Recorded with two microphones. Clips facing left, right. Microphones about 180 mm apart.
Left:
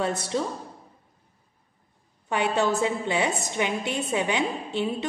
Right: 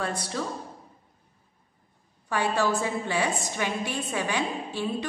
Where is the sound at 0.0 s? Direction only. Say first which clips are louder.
Left 4 dB; 25° left (ahead or behind).